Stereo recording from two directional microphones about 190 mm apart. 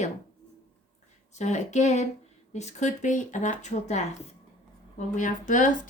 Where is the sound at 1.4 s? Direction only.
40° left (ahead or behind).